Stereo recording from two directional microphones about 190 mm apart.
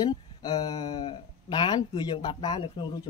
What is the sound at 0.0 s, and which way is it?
Speech, 20° left (ahead or behind).